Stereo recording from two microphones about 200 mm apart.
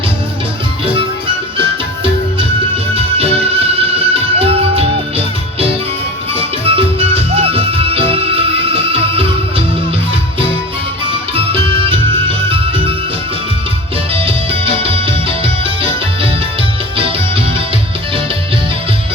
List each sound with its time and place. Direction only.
3.2 s music: 30° right (ahead or behind)
11.1 s music: 30° right (ahead or behind)
14.1 s music: 30° right (ahead or behind)